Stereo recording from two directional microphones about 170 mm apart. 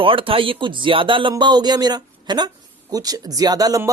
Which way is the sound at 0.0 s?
30° right (ahead or behind).